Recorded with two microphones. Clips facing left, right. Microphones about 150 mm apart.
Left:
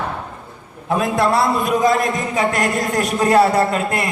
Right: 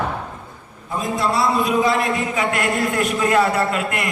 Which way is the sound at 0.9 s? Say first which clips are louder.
Left 5 dB; 65° left (ahead or behind).